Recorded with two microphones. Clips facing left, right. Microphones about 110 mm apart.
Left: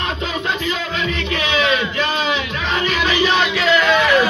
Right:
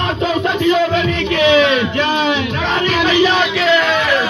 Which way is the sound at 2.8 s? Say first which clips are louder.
Right 4 dB; 70° right (ahead or behind).